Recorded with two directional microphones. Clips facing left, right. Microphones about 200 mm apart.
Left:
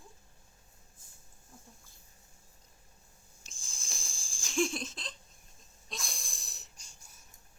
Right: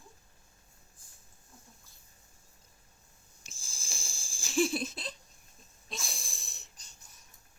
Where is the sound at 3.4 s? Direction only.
5° right (ahead or behind).